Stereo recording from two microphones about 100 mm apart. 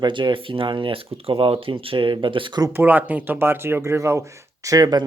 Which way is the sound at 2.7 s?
20° right (ahead or behind).